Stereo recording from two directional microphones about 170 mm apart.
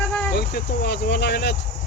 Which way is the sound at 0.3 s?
70° left (ahead or behind).